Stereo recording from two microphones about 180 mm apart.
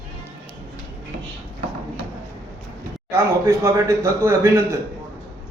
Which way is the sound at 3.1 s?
15° right (ahead or behind).